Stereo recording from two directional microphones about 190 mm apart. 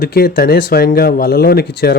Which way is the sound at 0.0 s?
55° left (ahead or behind).